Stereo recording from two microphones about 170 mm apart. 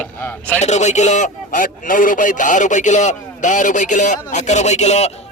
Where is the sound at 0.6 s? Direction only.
45° left (ahead or behind).